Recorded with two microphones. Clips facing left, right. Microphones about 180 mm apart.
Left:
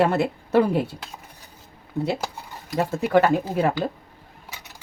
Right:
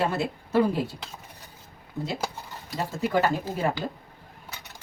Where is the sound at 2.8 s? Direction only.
65° left (ahead or behind).